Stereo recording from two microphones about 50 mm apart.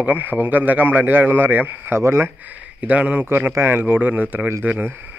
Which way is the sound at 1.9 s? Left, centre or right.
Right.